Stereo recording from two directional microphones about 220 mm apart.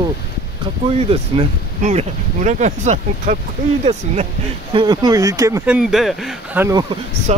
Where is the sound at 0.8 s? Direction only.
25° right (ahead or behind).